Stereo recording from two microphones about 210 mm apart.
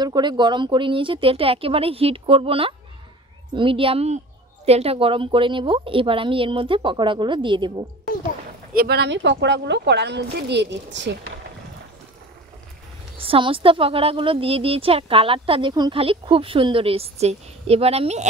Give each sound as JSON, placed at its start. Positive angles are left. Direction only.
{"t": 0.0, "sound": "a woman's voice", "side_deg": -20}
{"t": 8.7, "sound": "speech", "side_deg": -50}
{"t": 13.2, "sound": "a woman's voice", "side_deg": -25}